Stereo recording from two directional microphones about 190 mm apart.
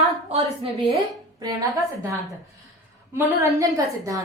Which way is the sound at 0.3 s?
35° right (ahead or behind).